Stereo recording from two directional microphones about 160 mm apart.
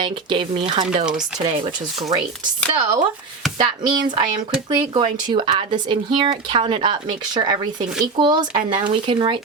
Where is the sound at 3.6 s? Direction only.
30° right (ahead or behind).